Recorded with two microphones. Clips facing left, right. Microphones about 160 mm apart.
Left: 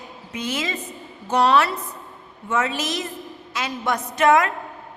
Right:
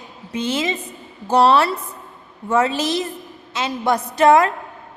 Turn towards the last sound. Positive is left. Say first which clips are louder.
# right 4 dB
turn(degrees=-30)  # may be behind; listen again after turning